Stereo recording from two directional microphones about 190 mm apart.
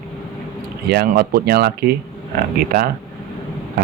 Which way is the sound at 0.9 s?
55° right (ahead or behind).